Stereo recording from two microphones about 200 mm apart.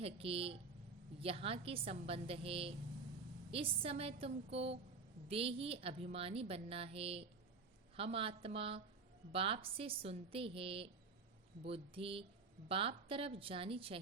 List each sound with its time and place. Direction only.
0.0 s a woman's voice: 30° right (ahead or behind)